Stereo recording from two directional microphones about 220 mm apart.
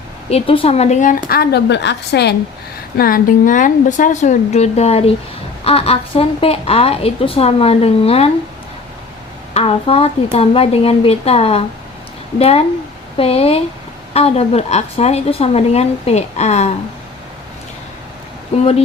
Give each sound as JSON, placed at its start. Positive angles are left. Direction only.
{"t": 0.3, "sound": "a woman's voice", "side_deg": 25}
{"t": 3.0, "sound": "a woman's voice", "side_deg": 40}
{"t": 9.6, "sound": "a woman's voice", "side_deg": 25}
{"t": 18.5, "sound": "a woman's voice", "side_deg": 30}